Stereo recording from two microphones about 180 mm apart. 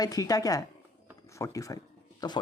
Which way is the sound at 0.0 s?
20° left (ahead or behind).